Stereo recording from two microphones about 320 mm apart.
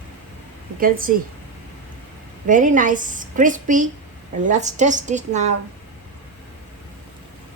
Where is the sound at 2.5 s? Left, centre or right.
Right.